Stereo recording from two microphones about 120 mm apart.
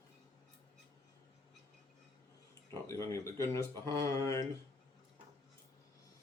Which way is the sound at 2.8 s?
25° left (ahead or behind).